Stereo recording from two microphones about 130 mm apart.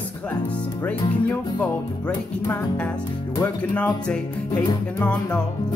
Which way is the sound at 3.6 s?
10° left (ahead or behind).